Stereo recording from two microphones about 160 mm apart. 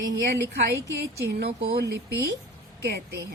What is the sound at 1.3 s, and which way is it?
A woman's voice, 90° right.